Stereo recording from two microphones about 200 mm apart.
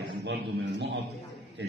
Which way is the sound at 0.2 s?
60° right (ahead or behind).